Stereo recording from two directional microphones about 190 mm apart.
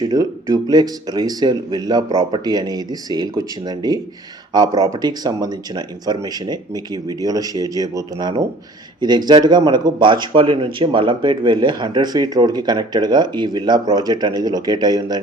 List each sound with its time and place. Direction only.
0.1 s speech: 20° right (ahead or behind)